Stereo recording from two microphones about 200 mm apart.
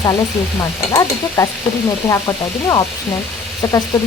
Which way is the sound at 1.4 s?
15° left (ahead or behind).